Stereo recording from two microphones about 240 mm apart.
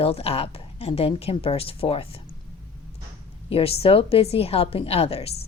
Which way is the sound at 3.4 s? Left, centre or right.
Left.